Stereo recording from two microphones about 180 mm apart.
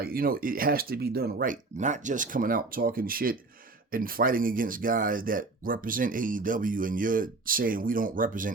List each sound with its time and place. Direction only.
0.0 s speech: 55° right (ahead or behind)